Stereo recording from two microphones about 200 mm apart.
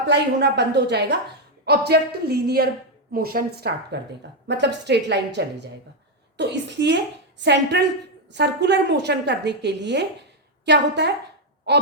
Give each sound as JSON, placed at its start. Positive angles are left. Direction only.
{"t": 0.0, "sound": "a woman's voice", "side_deg": -60}